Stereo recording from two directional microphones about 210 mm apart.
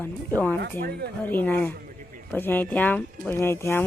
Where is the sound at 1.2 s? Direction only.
10° left (ahead or behind).